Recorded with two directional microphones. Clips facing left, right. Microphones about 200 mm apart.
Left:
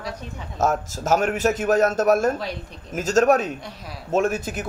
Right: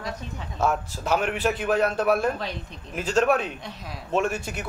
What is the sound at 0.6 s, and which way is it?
A man's voice, 45° left (ahead or behind).